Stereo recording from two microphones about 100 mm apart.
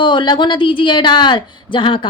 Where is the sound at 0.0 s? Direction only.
50° left (ahead or behind).